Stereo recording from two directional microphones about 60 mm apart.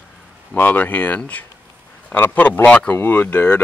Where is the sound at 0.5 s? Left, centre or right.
Left.